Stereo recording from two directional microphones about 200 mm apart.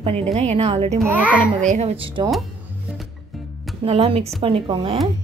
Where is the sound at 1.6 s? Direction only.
35° right (ahead or behind).